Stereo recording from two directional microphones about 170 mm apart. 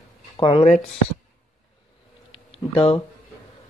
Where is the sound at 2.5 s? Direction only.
35° left (ahead or behind).